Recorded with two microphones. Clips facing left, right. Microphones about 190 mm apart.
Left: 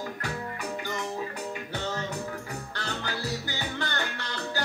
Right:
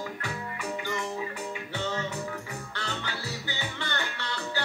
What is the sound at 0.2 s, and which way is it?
Music, 40° left (ahead or behind).